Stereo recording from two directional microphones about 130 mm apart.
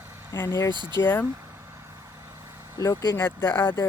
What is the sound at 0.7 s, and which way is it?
Speech, 35° right (ahead or behind).